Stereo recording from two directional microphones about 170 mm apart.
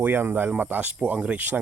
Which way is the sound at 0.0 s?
10° right (ahead or behind).